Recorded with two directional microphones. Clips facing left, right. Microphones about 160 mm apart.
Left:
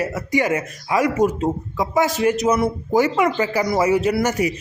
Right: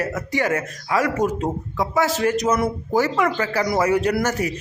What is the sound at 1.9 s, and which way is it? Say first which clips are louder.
Speech: left 2 dB; 15° left (ahead or behind).